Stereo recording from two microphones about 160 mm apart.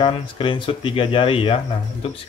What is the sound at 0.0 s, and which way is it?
Speech, 30° left (ahead or behind).